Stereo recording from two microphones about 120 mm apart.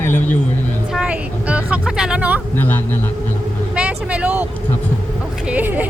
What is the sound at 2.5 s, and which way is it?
Speech, 15° left (ahead or behind).